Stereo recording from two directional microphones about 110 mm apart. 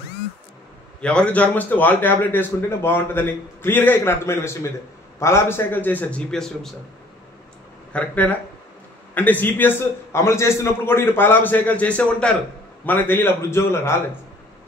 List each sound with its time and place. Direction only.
1.0 s a man's voice: 10° left (ahead or behind)
7.9 s a man's voice: 15° left (ahead or behind)